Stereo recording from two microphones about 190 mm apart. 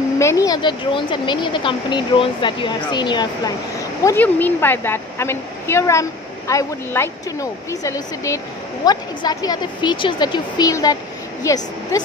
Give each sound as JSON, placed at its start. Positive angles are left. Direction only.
{"t": 0.2, "sound": "speech", "side_deg": 15}
{"t": 4.0, "sound": "a woman's voice", "side_deg": 10}